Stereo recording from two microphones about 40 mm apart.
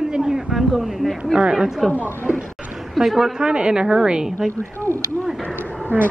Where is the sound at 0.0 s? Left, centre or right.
Centre.